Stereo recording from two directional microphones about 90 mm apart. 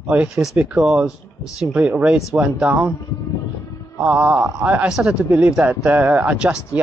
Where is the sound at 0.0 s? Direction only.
15° right (ahead or behind).